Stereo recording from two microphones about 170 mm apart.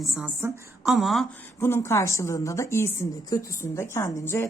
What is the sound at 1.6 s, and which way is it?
A woman's voice, 15° left (ahead or behind).